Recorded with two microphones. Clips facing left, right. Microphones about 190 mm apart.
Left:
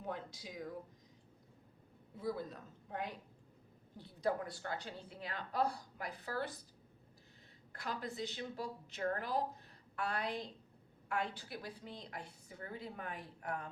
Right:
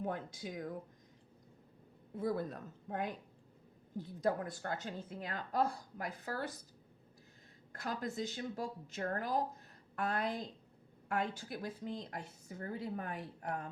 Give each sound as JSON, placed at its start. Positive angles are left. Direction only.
{"t": 0.0, "sound": "a woman's voice", "side_deg": -50}
{"t": 2.1, "sound": "a woman's voice", "side_deg": -55}
{"t": 7.7, "sound": "a woman's voice", "side_deg": -45}